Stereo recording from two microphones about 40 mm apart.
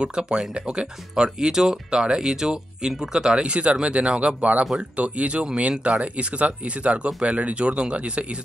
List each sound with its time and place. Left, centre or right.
0.0 s speech: right